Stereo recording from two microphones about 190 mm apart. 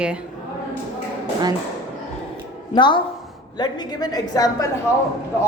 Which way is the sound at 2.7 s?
25° left (ahead or behind).